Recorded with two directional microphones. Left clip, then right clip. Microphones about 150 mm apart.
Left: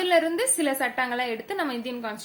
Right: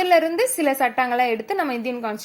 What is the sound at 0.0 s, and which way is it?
A woman's voice, 40° right (ahead or behind).